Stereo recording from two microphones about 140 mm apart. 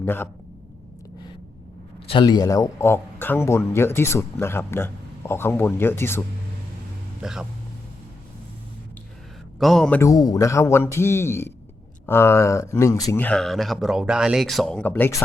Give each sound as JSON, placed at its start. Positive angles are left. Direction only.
{"t": 0.0, "sound": "a man's voice", "side_deg": 15}
{"t": 2.0, "sound": "speech", "side_deg": 35}
{"t": 7.2, "sound": "speech", "side_deg": -5}
{"t": 9.6, "sound": "speech", "side_deg": 0}
{"t": 10.0, "sound": "a man's voice", "side_deg": 25}
{"t": 13.1, "sound": "speech", "side_deg": 10}